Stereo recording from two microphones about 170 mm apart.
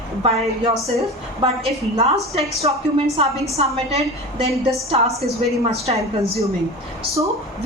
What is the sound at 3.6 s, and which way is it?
Speech, 35° right (ahead or behind).